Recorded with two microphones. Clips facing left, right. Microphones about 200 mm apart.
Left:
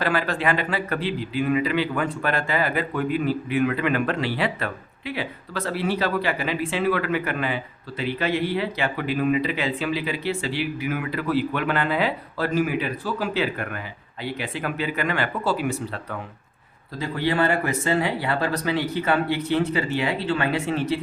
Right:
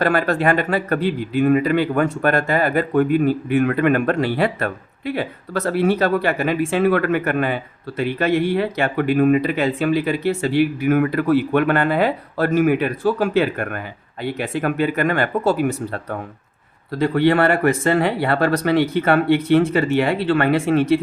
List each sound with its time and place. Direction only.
0.0 s speech: 50° right (ahead or behind)
17.0 s speech: 60° right (ahead or behind)